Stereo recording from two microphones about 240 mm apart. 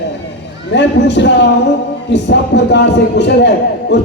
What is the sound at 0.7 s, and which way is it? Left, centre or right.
A man's voice, left.